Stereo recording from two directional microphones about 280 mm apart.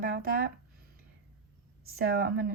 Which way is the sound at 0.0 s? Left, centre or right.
Right.